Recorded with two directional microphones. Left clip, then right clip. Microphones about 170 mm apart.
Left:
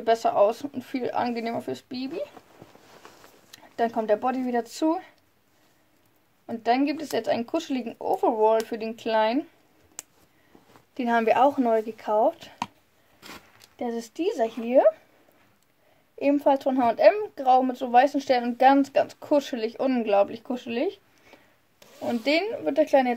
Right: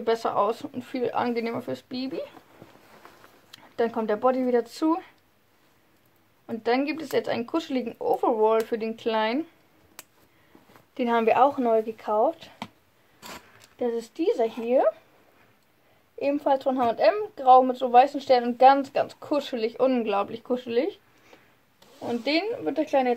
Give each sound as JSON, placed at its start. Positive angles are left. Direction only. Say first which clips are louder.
{"t": 0.0, "sound": "speech", "louder": "left 3 dB", "side_deg": 30}
{"t": 2.9, "sound": "a sound", "louder": "left 1 dB", "side_deg": 35}
{"t": 6.4, "sound": "speech", "louder": "left 1 dB", "side_deg": 30}
{"t": 11.0, "sound": "speech", "louder": "even", "side_deg": 30}
{"t": 13.7, "sound": "speech", "louder": "right 3 dB", "side_deg": 35}
{"t": 16.2, "sound": "speech", "louder": "left 2 dB", "side_deg": 35}
{"t": 22.2, "sound": "speech", "louder": "left 2 dB", "side_deg": 40}